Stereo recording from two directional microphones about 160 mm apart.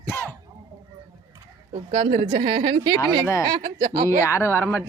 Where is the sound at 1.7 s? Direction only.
25° right (ahead or behind).